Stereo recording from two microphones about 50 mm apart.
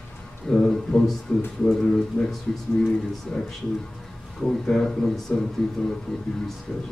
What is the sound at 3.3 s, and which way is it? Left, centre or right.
Speech, centre.